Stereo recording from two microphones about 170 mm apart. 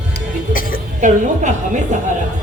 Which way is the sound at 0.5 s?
55° left (ahead or behind).